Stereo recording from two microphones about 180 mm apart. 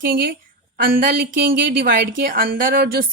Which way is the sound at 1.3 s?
65° right (ahead or behind).